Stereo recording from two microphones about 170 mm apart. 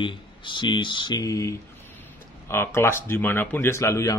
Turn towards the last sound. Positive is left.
turn(degrees=15)  # may be behind; listen again after turning